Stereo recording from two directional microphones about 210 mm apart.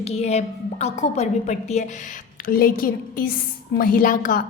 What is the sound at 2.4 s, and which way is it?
A woman's voice, 45° left (ahead or behind).